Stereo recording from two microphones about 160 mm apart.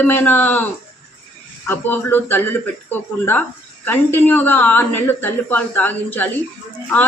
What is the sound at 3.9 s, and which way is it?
Speech, 10° left (ahead or behind).